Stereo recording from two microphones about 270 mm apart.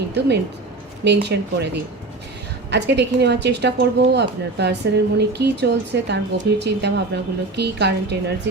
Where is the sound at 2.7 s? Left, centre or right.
Right.